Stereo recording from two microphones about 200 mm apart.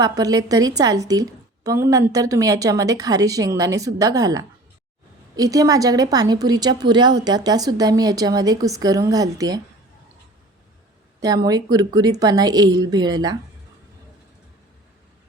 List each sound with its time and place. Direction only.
0.0 s a woman's voice: 20° right (ahead or behind)
11.2 s a woman's voice: 20° right (ahead or behind)